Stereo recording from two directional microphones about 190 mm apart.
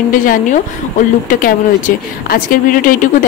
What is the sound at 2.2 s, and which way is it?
Speech, 45° left (ahead or behind).